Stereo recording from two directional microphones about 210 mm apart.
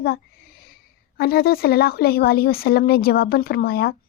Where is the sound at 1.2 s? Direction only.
45° left (ahead or behind).